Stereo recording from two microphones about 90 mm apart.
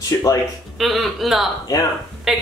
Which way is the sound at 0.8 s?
Centre (ahead or behind).